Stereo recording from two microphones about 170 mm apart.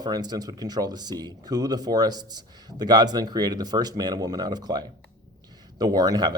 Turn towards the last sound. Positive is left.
turn(degrees=-25)  # may be behind; listen again after turning